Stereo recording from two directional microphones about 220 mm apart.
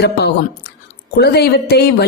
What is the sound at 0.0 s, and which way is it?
Speech, 50° left (ahead or behind).